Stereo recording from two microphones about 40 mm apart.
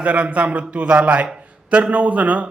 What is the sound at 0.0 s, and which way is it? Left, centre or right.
A man's voice, right.